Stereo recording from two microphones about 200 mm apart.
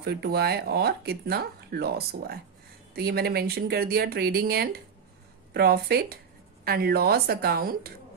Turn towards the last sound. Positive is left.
turn(degrees=-50)  # may be behind; listen again after turning